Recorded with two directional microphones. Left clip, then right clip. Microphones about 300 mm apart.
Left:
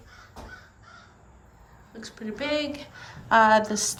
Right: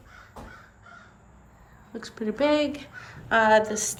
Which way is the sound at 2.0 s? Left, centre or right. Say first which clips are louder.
Right 7 dB; centre.